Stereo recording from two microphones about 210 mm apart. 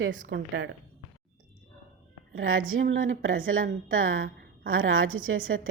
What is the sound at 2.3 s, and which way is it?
Speech, 80° right.